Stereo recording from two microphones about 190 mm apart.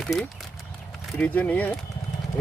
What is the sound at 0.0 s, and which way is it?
Speech, 5° left (ahead or behind).